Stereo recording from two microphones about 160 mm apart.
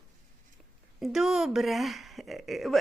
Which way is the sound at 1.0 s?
Centre (ahead or behind).